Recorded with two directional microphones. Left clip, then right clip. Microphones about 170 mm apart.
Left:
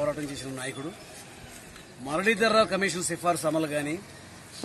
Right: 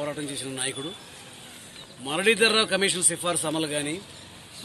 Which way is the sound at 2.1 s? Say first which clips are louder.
Right 2 dB; 20° right (ahead or behind).